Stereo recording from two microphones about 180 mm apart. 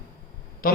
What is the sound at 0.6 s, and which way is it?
Speech, 55° left (ahead or behind).